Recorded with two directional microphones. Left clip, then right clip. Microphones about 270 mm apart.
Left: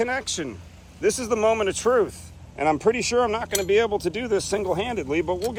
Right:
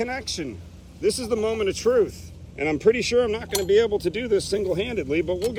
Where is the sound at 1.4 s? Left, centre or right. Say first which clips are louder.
Left 4 dB; left.